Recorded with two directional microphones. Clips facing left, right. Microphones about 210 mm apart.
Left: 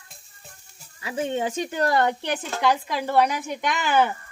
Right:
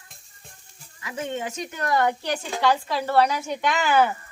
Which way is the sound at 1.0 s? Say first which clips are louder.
Left 4 dB; 30° left (ahead or behind).